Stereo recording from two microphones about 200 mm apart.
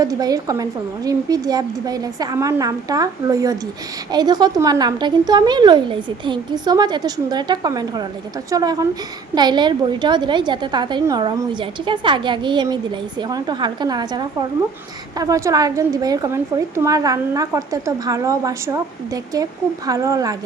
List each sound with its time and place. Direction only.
0.0 s a woman's voice: 20° right (ahead or behind)